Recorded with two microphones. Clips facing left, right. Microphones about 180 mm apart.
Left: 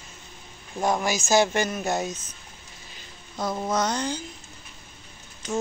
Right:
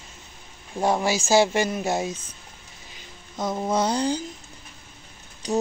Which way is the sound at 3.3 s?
20° right (ahead or behind).